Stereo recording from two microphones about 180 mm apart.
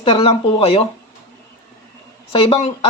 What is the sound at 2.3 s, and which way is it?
Speech, 30° left (ahead or behind).